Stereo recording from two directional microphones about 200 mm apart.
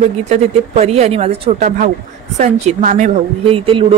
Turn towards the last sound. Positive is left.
turn(degrees=-25)  # may be behind; listen again after turning